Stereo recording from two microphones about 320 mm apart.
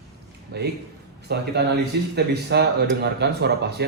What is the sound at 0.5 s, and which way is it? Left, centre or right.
Speech, right.